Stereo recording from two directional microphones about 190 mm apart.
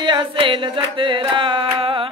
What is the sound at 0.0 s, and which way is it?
Music, 25° right (ahead or behind).